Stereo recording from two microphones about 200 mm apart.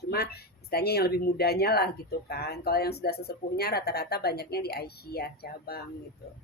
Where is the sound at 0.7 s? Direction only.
50° left (ahead or behind).